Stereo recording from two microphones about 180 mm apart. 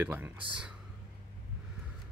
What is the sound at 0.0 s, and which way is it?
Speech, 10° right (ahead or behind).